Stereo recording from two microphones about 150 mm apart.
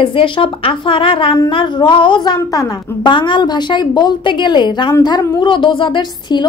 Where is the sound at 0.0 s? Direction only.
35° left (ahead or behind).